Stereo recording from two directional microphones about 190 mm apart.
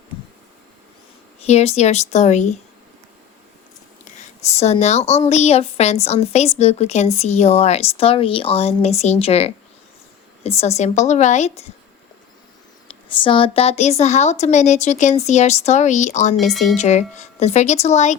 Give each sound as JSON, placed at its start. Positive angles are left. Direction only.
{"t": 1.4, "sound": "a woman's voice", "side_deg": 35}
{"t": 4.0, "sound": "a woman's voice", "side_deg": 35}
{"t": 13.1, "sound": "a woman's voice", "side_deg": 25}
{"t": 16.5, "sound": "speech", "side_deg": 0}
{"t": 16.7, "sound": "a woman's voice", "side_deg": 35}